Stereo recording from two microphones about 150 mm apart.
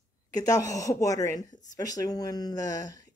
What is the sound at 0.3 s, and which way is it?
Speech, 25° left (ahead or behind).